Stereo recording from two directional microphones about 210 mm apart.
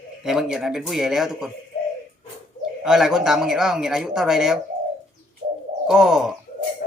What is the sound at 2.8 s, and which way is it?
Speech, centre (ahead or behind).